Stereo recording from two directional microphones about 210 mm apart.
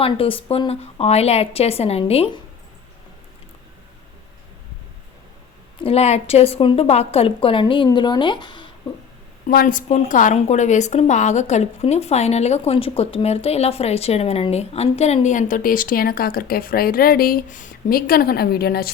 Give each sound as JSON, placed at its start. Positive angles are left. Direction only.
{"t": 0.0, "sound": "a woman's voice", "side_deg": 25}
{"t": 5.8, "sound": "a woman's voice", "side_deg": 30}
{"t": 9.5, "sound": "a woman's voice", "side_deg": 45}